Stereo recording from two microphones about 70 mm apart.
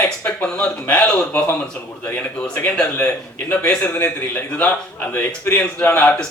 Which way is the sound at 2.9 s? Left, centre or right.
Left.